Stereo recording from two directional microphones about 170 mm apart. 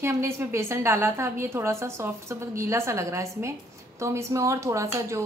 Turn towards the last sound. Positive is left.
turn(degrees=-15)  # may be behind; listen again after turning